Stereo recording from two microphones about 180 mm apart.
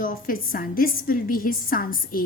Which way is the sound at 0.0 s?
50° left (ahead or behind).